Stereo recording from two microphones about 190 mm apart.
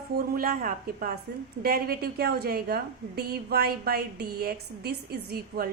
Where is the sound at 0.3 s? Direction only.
50° right (ahead or behind).